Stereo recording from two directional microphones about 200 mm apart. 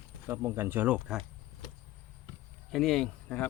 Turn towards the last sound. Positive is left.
turn(degrees=5)  # may be behind; listen again after turning